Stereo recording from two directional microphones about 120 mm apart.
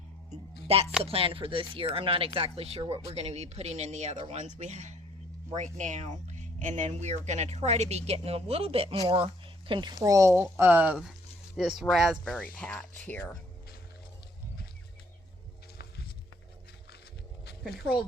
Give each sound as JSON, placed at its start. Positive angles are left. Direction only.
{"t": 0.3, "sound": "music", "side_deg": -55}
{"t": 1.0, "sound": "speech", "side_deg": -50}